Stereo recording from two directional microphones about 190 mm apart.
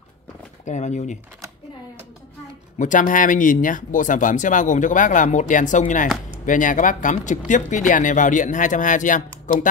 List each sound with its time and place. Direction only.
0.7 s speech: 40° left (ahead or behind)
2.8 s speech: 45° left (ahead or behind)